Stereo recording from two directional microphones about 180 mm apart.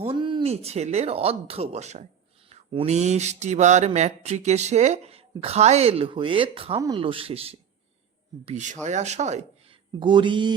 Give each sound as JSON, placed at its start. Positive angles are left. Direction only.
{"t": 0.0, "sound": "mantra", "side_deg": -30}
{"t": 6.8, "sound": "speech", "side_deg": -30}
{"t": 8.4, "sound": "mantra", "side_deg": -40}
{"t": 10.0, "sound": "speech", "side_deg": -25}